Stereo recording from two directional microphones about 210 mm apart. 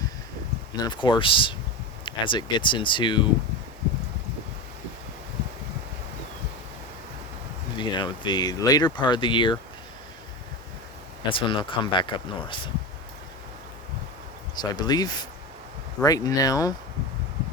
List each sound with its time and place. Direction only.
0.8 s speech: 20° left (ahead or behind)
7.8 s speech: 20° left (ahead or behind)
11.3 s speech: 25° left (ahead or behind)
14.5 s speech: 20° left (ahead or behind)